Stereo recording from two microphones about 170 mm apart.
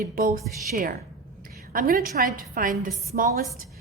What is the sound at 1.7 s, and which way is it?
A woman's voice, 55° right (ahead or behind).